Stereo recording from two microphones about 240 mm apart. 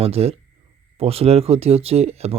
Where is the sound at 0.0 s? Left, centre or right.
Right.